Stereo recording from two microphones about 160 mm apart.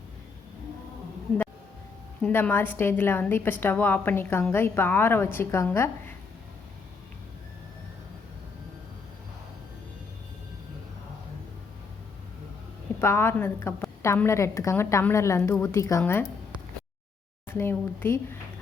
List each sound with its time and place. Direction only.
2.2 s a woman's voice: 10° left (ahead or behind)
13.0 s a woman's voice: 15° left (ahead or behind)
17.5 s a woman's voice: 15° left (ahead or behind)